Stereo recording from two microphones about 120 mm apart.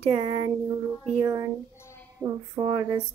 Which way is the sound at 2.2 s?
35° right (ahead or behind).